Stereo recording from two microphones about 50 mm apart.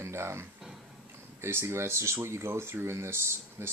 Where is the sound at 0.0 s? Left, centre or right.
Right.